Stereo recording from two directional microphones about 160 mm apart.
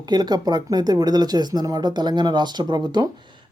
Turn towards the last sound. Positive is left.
turn(degrees=-25)  # may be behind; listen again after turning